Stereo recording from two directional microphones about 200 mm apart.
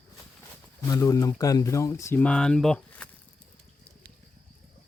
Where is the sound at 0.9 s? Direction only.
15° left (ahead or behind).